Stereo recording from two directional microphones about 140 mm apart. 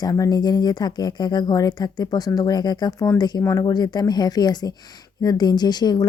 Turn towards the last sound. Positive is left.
turn(degrees=30)  # may be behind; listen again after turning